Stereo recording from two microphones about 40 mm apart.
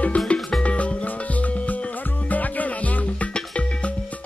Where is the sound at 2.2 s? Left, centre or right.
Left.